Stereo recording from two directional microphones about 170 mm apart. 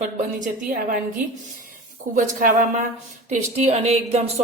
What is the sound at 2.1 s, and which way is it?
A woman's voice, 50° right (ahead or behind).